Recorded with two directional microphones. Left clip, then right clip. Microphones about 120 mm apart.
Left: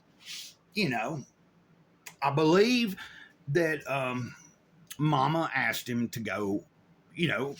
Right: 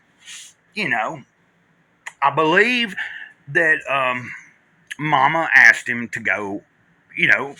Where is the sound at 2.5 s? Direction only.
25° left (ahead or behind).